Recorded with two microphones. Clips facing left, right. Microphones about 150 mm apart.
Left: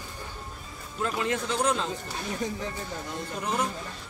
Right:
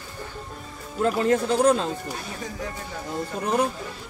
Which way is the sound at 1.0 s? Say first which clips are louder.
Right 8 dB; 40° right (ahead or behind).